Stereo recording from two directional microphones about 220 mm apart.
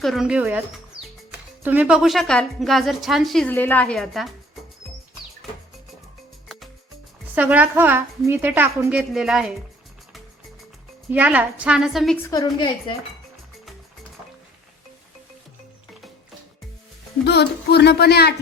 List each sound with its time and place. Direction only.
0.0 s speech: centre (ahead or behind)
1.6 s speech: 10° right (ahead or behind)
7.3 s a woman's voice: 10° right (ahead or behind)
11.1 s speech: 5° right (ahead or behind); by 12.5 s 15° left (ahead or behind)
17.2 s speech: 50° left (ahead or behind)